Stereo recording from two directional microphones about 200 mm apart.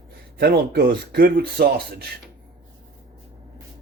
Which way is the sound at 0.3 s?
55° right (ahead or behind).